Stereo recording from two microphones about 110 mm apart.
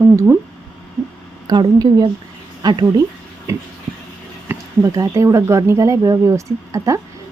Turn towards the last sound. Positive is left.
turn(degrees=-30)  # may be behind; listen again after turning